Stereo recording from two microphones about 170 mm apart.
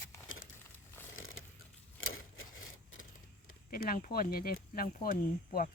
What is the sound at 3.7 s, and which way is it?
Speech, 55° left (ahead or behind).